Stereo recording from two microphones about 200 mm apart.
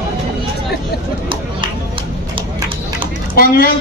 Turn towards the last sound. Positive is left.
turn(degrees=50)  # may be behind; listen again after turning